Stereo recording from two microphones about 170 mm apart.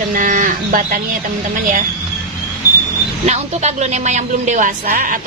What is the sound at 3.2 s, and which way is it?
A woman's voice, 40° right (ahead or behind).